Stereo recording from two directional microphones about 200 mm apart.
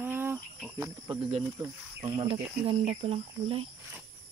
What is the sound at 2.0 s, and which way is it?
Speech, 30° right (ahead or behind).